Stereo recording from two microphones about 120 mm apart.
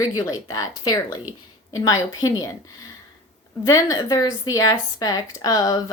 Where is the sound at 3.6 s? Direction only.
30° left (ahead or behind).